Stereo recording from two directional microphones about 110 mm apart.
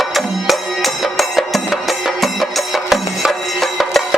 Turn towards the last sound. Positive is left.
turn(degrees=0)  # may be behind; listen again after turning